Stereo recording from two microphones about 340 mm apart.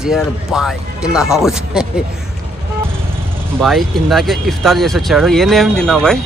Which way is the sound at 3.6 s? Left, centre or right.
Centre.